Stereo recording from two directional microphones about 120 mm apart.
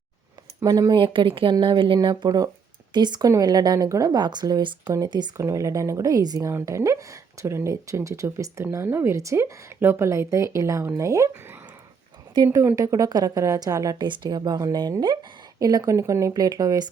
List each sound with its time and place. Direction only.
0.6 s speech: 35° right (ahead or behind)
5.4 s speech: 25° right (ahead or behind)
12.5 s a woman's voice: 15° right (ahead or behind)
12.7 s speech: 30° right (ahead or behind)